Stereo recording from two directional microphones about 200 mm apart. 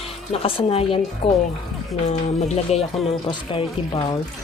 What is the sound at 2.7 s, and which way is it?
A woman's voice, 30° left (ahead or behind).